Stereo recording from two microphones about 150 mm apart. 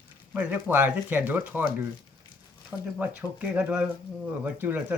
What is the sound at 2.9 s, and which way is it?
Speech, 10° right (ahead or behind).